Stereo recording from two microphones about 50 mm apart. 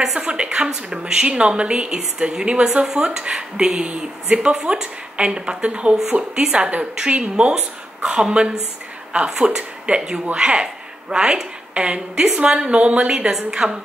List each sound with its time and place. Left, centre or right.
0.1 s a woman's voice: right